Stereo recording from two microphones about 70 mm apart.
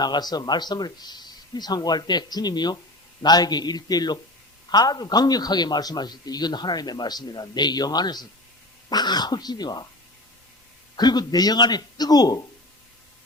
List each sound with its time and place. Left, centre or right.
0.0 s a man's voice: left
10.9 s a man's voice: left